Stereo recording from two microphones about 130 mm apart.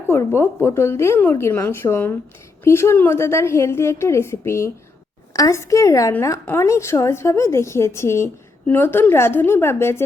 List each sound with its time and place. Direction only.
0.1 s a woman's voice: 20° left (ahead or behind)